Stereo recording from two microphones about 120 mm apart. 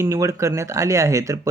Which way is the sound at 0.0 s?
25° right (ahead or behind).